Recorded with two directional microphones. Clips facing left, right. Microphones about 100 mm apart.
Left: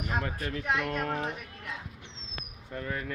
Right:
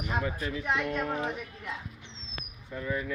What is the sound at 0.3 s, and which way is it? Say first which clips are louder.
Speech: right 1 dB; 55° left (ahead or behind).